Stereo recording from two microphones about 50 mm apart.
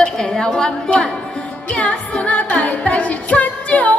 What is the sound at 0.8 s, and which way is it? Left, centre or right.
Music, left.